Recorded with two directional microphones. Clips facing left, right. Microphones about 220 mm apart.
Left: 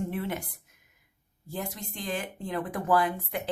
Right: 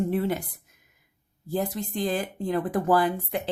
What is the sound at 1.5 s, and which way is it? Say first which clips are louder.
Speech: right 8 dB; 35° right (ahead or behind).